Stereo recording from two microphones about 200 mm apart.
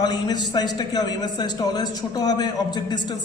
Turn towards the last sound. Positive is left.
turn(degrees=20)  # may be behind; listen again after turning